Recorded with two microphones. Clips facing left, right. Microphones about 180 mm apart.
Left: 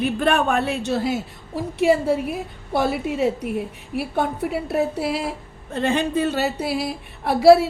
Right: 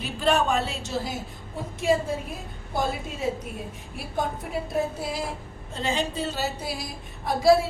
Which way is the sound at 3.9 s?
70° left (ahead or behind).